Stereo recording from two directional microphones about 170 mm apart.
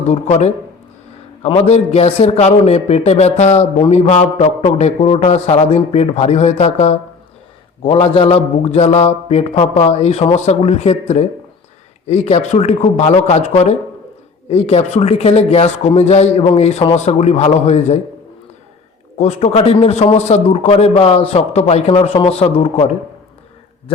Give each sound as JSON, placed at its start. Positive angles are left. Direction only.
{"t": 0.1, "sound": "a man's voice", "side_deg": 40}
{"t": 19.1, "sound": "a man's voice", "side_deg": 35}